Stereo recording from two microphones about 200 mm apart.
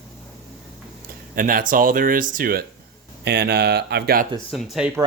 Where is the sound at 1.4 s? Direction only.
45° right (ahead or behind).